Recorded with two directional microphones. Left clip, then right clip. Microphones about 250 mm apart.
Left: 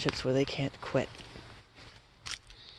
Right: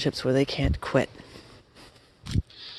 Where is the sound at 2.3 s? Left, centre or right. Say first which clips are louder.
Right 4 dB; centre.